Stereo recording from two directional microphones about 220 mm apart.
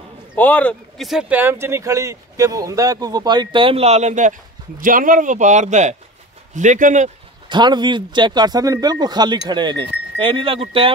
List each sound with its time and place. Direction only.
0.4 s speech: 5° left (ahead or behind); by 7.1 s 35° right (ahead or behind)
7.4 s speech: 20° right (ahead or behind)